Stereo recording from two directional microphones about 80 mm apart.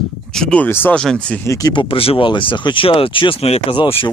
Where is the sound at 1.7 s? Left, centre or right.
Left.